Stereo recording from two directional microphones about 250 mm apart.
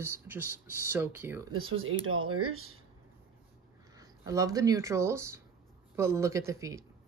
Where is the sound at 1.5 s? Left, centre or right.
Right.